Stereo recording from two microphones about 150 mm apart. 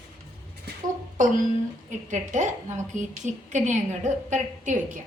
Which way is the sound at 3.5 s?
50° right (ahead or behind).